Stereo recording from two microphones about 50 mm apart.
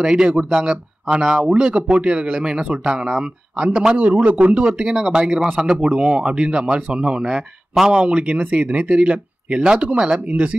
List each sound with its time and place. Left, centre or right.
0.0 s a man's voice: centre
4.0 s a man's voice: right